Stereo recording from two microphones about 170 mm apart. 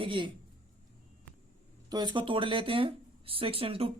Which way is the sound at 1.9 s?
25° right (ahead or behind).